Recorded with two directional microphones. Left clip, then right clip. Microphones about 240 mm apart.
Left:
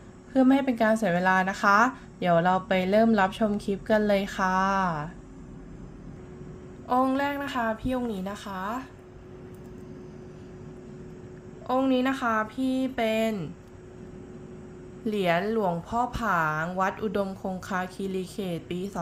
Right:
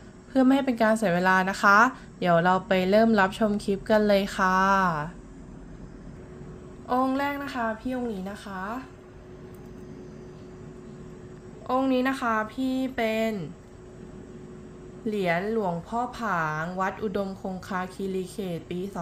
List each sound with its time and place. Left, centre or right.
0.3 s speech: centre
6.8 s speech: centre
11.6 s speech: centre
15.0 s speech: centre